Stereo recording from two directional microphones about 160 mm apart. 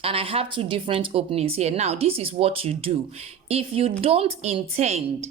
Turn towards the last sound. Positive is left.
turn(degrees=-40)  # may be behind; listen again after turning